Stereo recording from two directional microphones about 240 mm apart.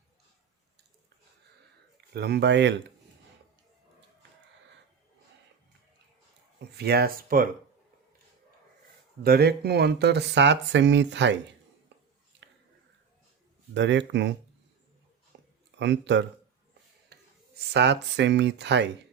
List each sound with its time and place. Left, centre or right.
2.1 s speech: right
6.6 s speech: right
9.2 s speech: right
13.7 s speech: right
15.3 s a sound: right
15.8 s speech: right
17.1 s clicking: right
17.7 s speech: right